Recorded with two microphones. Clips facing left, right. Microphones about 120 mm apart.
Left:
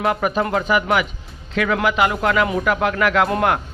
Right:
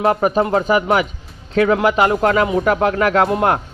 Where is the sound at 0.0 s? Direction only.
35° right (ahead or behind).